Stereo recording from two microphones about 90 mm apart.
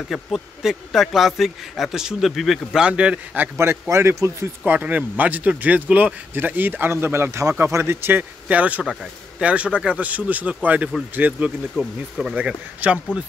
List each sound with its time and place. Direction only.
0.1 s speech: 5° right (ahead or behind)
3.9 s speech: 35° right (ahead or behind)
4.6 s speech: 15° right (ahead or behind)
11.7 s speech: centre (ahead or behind)
12.4 s speech: 10° right (ahead or behind)